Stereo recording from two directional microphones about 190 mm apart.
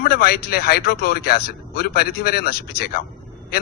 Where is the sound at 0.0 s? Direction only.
55° left (ahead or behind).